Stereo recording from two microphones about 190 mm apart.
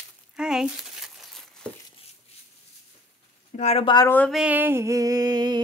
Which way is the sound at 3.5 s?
35° left (ahead or behind).